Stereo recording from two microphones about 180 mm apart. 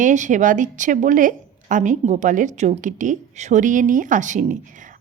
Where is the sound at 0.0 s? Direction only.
45° right (ahead or behind).